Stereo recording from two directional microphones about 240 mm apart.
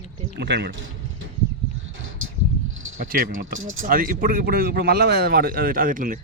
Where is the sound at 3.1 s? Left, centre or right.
Right.